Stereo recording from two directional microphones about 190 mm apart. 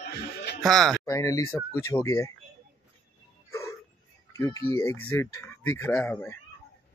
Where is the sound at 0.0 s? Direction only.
60° left (ahead or behind).